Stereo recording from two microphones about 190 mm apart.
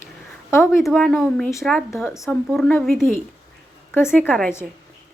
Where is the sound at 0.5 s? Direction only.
15° left (ahead or behind).